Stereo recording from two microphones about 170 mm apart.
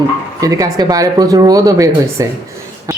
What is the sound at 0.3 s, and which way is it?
Speech, 20° right (ahead or behind).